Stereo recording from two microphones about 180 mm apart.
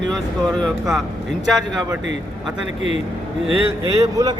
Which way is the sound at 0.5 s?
Centre (ahead or behind).